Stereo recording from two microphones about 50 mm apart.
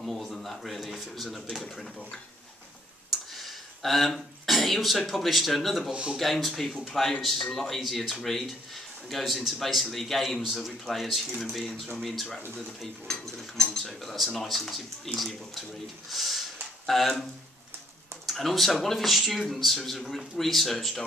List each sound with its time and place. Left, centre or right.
0.0 s speech: centre
1.6 s speech: centre
3.1 s speech: centre
5.9 s speech: centre
6.1 s speech: centre
18.2 s speech: centre